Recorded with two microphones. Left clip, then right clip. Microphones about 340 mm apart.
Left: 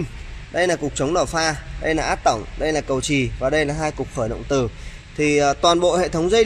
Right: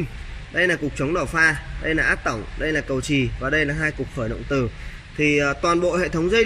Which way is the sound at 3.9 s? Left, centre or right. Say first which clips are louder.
Left 2 dB; left.